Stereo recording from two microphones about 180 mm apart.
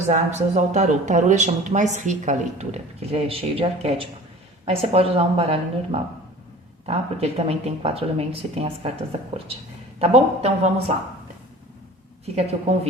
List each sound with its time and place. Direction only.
0.1 s speech: 40° right (ahead or behind)
10.0 s speech: 35° right (ahead or behind)
12.2 s speech: 35° right (ahead or behind)